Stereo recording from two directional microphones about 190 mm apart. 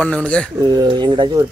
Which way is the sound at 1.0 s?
25° right (ahead or behind).